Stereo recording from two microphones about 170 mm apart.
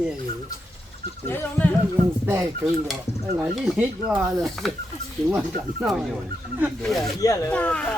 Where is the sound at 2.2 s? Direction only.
15° right (ahead or behind).